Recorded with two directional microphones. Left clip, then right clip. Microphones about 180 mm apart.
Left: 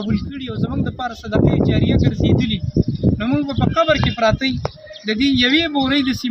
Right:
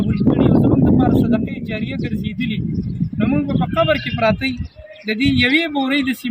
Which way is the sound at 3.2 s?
5° right (ahead or behind).